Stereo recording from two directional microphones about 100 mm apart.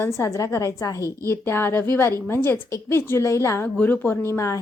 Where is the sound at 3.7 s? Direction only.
15° left (ahead or behind).